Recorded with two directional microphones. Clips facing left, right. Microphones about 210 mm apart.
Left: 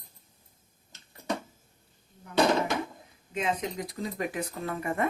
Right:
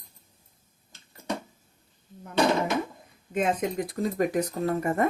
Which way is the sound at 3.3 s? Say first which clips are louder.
Right 5 dB; 50° right (ahead or behind).